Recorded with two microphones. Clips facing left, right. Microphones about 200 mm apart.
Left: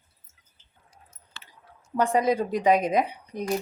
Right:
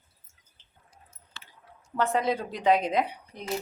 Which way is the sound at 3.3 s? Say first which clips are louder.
Left 11 dB; 45° left (ahead or behind).